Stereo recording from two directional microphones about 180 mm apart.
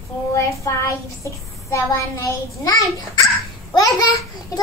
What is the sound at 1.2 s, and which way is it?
A child's voice, 20° left (ahead or behind).